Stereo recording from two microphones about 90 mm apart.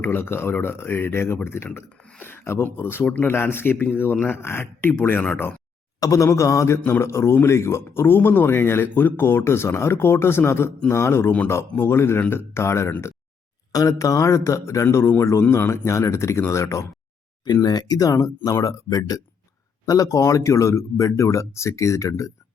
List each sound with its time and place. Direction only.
0.0 s speech: 25° left (ahead or behind)
6.0 s a man's voice: 35° left (ahead or behind)
17.4 s a man's voice: 45° left (ahead or behind)